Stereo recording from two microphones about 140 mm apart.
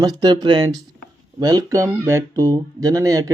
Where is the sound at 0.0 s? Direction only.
30° right (ahead or behind).